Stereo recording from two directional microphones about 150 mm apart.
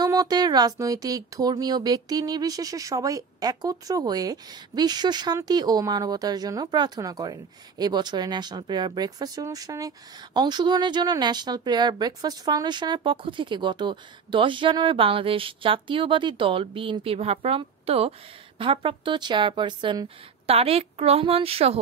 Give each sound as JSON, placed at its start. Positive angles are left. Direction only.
{"t": 0.0, "sound": "speech", "side_deg": -25}